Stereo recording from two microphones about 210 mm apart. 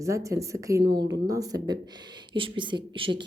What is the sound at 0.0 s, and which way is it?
Speech, 15° right (ahead or behind).